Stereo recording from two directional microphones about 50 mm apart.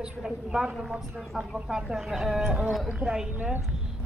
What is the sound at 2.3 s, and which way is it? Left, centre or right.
A woman's voice, centre.